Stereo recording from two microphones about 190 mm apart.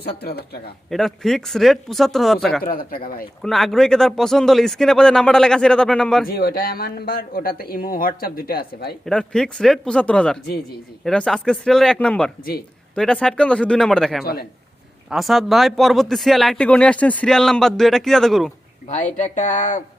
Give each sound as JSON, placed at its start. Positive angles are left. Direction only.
{"t": 0.2, "sound": "speech", "side_deg": 60}
{"t": 0.9, "sound": "a man's voice", "side_deg": 0}
{"t": 2.6, "sound": "speech", "side_deg": 50}
{"t": 3.4, "sound": "a man's voice", "side_deg": 0}
{"t": 6.2, "sound": "speech", "side_deg": 50}
{"t": 9.0, "sound": "a man's voice", "side_deg": 5}
{"t": 18.9, "sound": "speech", "side_deg": 40}